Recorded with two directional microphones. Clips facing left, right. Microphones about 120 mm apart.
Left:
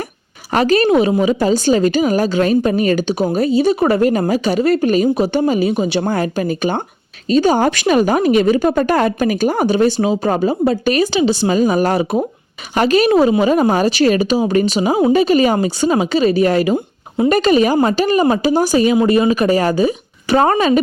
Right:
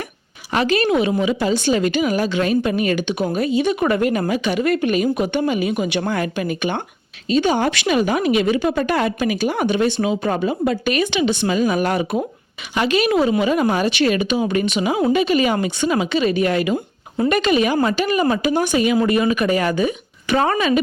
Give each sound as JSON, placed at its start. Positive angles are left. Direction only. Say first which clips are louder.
{"t": 0.5, "sound": "a woman's voice", "louder": "left 5 dB", "side_deg": 40}